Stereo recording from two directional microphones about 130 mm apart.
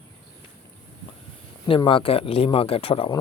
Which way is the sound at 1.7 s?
40° left (ahead or behind).